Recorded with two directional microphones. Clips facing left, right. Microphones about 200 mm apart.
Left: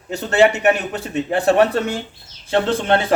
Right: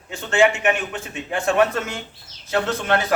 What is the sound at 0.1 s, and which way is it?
A man's voice, 40° left (ahead or behind).